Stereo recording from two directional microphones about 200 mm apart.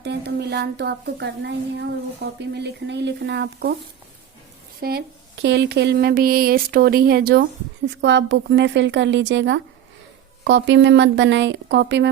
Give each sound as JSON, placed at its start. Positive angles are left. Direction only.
{"t": 0.0, "sound": "a woman's voice", "side_deg": -55}
{"t": 4.8, "sound": "speech", "side_deg": -50}
{"t": 7.9, "sound": "a woman's voice", "side_deg": -65}